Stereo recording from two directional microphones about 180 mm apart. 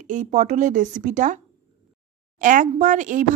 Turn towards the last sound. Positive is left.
turn(degrees=-45)  # may be behind; listen again after turning